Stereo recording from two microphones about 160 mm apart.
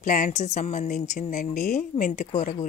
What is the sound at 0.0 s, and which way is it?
A woman's voice, 55° left (ahead or behind).